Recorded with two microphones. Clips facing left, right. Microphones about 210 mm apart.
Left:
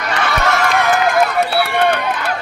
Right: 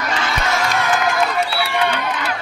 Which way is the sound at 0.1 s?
65° left (ahead or behind).